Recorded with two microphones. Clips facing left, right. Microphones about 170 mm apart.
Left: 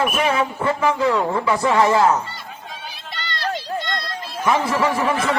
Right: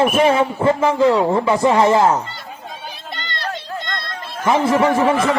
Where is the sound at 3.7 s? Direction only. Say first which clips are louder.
Left 2 dB; 25° left (ahead or behind).